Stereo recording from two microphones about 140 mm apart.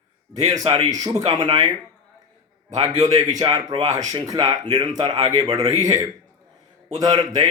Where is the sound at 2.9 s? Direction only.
25° right (ahead or behind).